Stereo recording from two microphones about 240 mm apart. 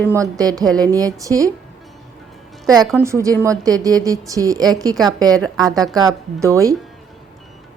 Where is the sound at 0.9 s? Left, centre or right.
Centre.